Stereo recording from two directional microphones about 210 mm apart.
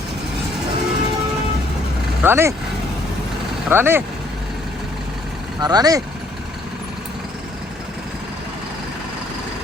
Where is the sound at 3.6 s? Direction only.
10° right (ahead or behind).